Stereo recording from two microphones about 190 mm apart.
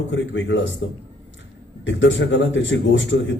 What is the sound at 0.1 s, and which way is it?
A man's voice, 75° left (ahead or behind).